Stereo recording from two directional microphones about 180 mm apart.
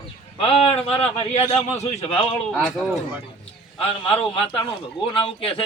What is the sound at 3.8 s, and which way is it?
A man's voice, 30° left (ahead or behind).